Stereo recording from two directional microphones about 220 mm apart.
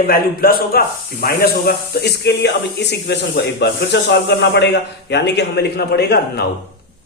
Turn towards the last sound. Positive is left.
turn(degrees=45)  # may be behind; listen again after turning